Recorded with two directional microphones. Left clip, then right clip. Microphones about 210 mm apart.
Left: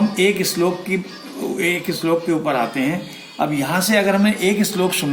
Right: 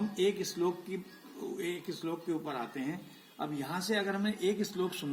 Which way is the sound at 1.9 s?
15° left (ahead or behind).